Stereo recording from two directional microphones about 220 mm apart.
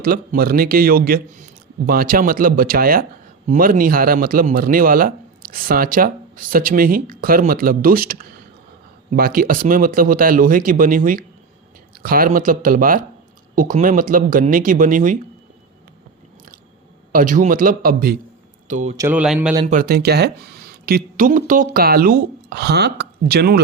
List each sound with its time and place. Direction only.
0.0 s speech: 40° right (ahead or behind)
17.1 s speech: 40° right (ahead or behind)
18.9 s speech: 10° right (ahead or behind)
19.6 s speech: 40° right (ahead or behind)